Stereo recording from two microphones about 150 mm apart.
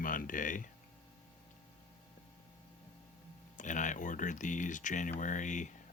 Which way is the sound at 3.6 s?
55° left (ahead or behind).